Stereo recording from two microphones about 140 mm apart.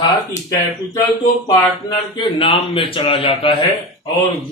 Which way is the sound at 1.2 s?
35° left (ahead or behind).